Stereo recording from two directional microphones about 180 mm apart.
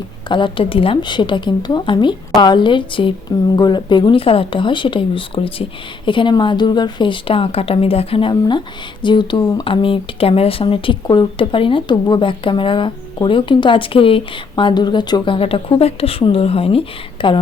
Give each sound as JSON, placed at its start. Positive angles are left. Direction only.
{"t": 0.3, "sound": "speech", "side_deg": 25}